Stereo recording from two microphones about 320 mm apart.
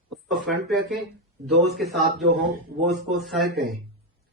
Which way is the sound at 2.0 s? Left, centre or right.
Right.